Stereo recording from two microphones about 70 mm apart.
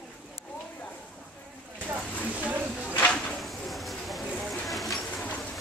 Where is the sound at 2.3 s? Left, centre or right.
Centre.